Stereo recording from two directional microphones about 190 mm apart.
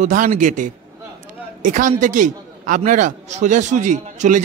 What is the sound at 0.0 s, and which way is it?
A man's voice, 40° right (ahead or behind).